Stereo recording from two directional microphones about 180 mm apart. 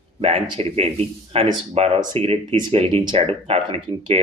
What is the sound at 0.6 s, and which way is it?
Speech, 35° right (ahead or behind).